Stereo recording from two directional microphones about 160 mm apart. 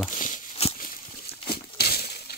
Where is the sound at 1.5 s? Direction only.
80° left.